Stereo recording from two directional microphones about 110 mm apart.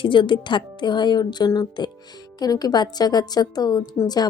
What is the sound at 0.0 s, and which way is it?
Speech, 50° left (ahead or behind).